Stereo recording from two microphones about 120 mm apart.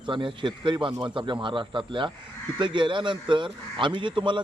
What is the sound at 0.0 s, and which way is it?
A man's voice, 45° right (ahead or behind).